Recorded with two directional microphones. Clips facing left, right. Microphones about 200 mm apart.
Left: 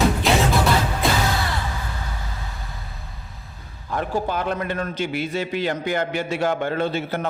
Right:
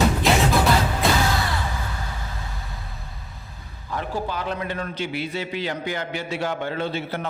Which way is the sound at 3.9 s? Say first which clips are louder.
Left 4 dB; 50° left (ahead or behind).